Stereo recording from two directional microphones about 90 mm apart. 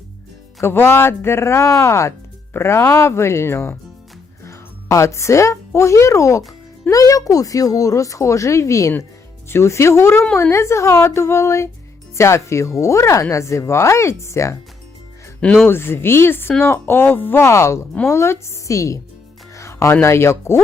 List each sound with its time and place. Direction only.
0.6 s speech: 25° left (ahead or behind)
15.6 s speech: 25° left (ahead or behind)